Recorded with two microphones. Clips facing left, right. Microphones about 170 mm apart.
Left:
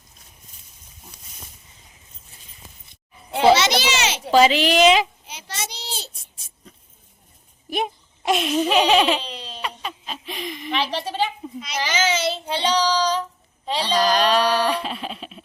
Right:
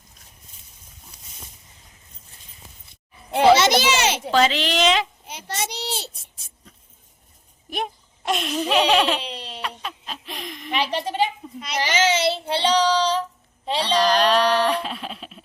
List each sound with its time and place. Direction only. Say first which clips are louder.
3.3 s a child's voice: right 1 dB; 50° right (ahead or behind)
4.3 s a woman's voice: left 6 dB; 10° left (ahead or behind)
5.2 s child singing: right 3 dB; 55° right (ahead or behind)
7.7 s baby laughter: left 3 dB; centre (ahead or behind)
10.8 s a woman's voice: right 2 dB; 15° right (ahead or behind)
11.6 s a child's voice: right 2 dB; 65° right (ahead or behind)
12.2 s child singing: right 2 dB; 30° right (ahead or behind)
13.9 s music: even; centre (ahead or behind)